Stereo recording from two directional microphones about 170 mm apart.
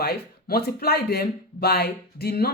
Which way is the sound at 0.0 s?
65° left (ahead or behind).